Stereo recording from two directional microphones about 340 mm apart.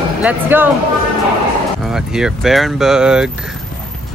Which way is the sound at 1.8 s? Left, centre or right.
Centre.